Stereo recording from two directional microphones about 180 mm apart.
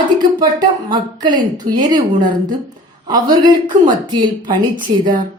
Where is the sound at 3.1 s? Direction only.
25° right (ahead or behind).